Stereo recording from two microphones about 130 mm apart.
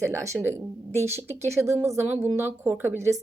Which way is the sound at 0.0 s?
20° right (ahead or behind).